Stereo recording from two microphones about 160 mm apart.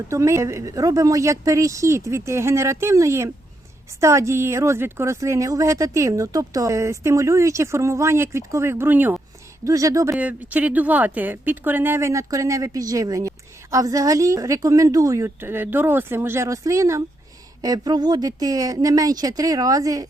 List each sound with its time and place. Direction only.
0.1 s speech: 20° right (ahead or behind)
10.2 s speech: 10° right (ahead or behind)